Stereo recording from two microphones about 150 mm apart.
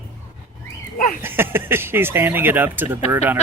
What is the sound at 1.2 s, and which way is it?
Speech, 15° right (ahead or behind).